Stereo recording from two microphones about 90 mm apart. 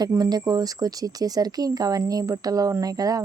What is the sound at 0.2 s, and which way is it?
Speech, 45° right (ahead or behind).